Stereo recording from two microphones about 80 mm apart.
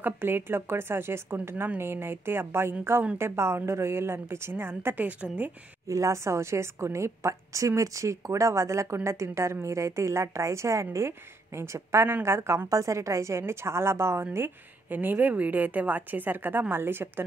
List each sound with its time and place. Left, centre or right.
0.0 s a woman's voice: right
5.9 s a woman's voice: right